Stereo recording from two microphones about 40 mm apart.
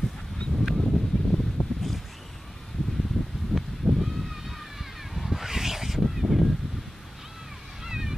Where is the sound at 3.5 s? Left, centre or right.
Centre.